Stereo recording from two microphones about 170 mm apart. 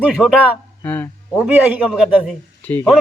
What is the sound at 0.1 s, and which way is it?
Speech, centre (ahead or behind).